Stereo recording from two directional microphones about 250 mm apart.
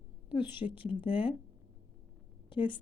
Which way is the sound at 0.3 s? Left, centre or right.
Centre.